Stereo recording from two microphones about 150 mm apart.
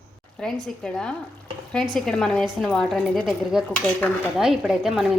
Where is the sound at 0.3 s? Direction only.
5° left (ahead or behind).